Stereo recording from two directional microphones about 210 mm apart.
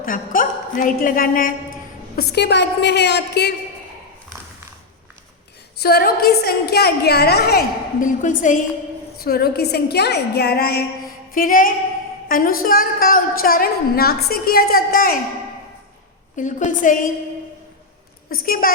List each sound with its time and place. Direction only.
0.0 s a woman's voice: 40° left (ahead or behind)
5.8 s a woman's voice: 45° left (ahead or behind)
8.0 s a woman's voice: 40° left (ahead or behind)
16.3 s a woman's voice: 35° left (ahead or behind)
18.3 s a woman's voice: 45° left (ahead or behind)